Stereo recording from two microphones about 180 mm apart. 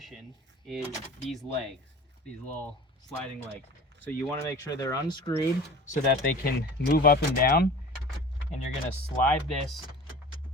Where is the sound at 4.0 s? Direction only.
10° left (ahead or behind).